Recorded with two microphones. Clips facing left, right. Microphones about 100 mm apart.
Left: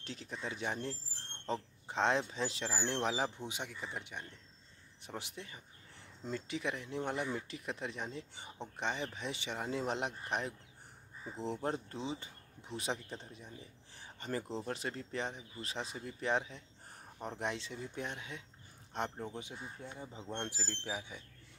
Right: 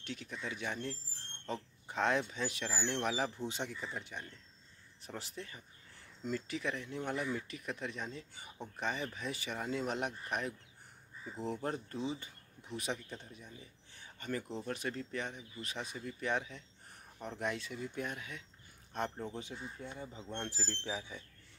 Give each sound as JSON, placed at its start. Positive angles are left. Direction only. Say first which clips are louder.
{"t": 0.0, "sound": "speech", "louder": "even", "side_deg": 30}
{"t": 3.4, "sound": "speech", "louder": "right 3 dB", "side_deg": 15}